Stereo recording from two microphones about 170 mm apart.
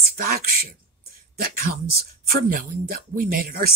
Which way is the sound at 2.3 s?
55° right (ahead or behind).